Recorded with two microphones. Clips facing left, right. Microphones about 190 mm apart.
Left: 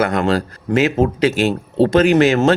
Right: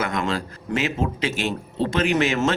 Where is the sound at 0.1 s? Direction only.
35° left (ahead or behind).